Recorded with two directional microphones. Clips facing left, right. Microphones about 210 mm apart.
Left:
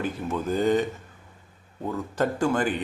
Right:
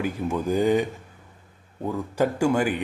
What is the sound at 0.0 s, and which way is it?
A man's voice, 15° right (ahead or behind).